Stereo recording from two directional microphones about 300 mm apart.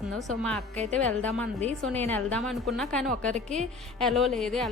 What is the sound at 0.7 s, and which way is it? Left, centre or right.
Speech, right.